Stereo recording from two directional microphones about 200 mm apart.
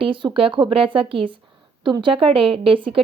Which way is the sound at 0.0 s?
25° right (ahead or behind).